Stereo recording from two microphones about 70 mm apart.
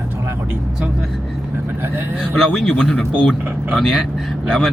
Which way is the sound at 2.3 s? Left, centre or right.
Centre.